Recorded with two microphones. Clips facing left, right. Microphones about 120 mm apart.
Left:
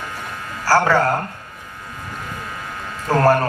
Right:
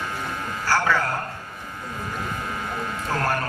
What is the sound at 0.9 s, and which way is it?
Speech, 40° left (ahead or behind).